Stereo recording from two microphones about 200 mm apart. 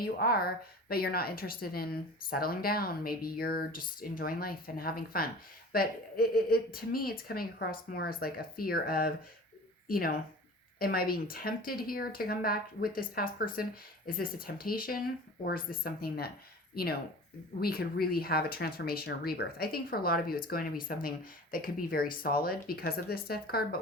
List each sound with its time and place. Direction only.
0.0 s speech: 50° left (ahead or behind)